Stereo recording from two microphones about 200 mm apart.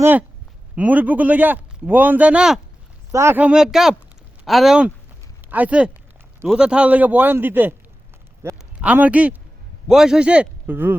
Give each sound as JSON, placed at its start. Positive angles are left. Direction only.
{"t": 0.0, "sound": "a man's voice", "side_deg": -10}